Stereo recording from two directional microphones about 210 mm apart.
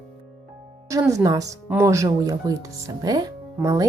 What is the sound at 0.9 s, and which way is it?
Speech, 15° right (ahead or behind).